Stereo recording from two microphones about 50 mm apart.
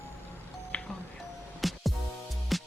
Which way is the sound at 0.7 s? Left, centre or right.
Left.